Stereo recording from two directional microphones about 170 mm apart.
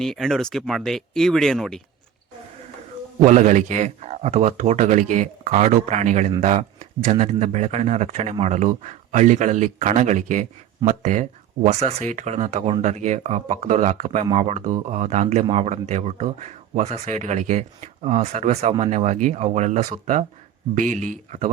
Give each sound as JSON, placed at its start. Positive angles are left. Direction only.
{"t": 0.0, "sound": "speech", "side_deg": 5}
{"t": 3.2, "sound": "speech", "side_deg": -45}